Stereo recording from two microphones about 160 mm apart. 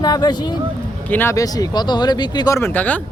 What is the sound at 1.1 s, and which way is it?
Speech, 15° left (ahead or behind).